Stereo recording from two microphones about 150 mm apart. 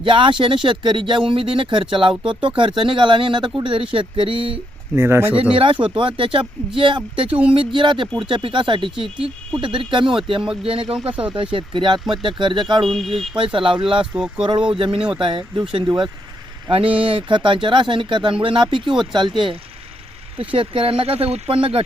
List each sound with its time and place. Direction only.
0.0 s speech: 35° right (ahead or behind)
4.9 s speech: 15° right (ahead or behind)
5.5 s speech: 35° right (ahead or behind)
12.8 s speech: centre (ahead or behind)
13.3 s speech: 35° right (ahead or behind)
14.0 s speech: 5° right (ahead or behind)
15.2 s speech: 35° right (ahead or behind)
20.4 s speech: 35° right (ahead or behind)